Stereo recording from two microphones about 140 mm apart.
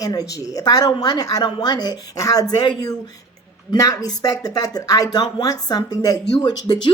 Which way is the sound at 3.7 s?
25° left (ahead or behind).